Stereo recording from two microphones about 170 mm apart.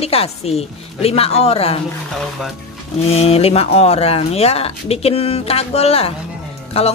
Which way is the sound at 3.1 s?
35° left (ahead or behind).